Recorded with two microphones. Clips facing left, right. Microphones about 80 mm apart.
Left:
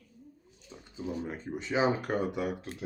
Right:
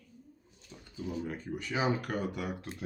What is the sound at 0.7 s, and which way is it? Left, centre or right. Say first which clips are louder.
Speech: left 2 dB; left.